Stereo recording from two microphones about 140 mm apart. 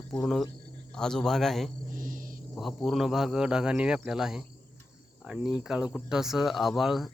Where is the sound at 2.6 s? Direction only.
Centre (ahead or behind).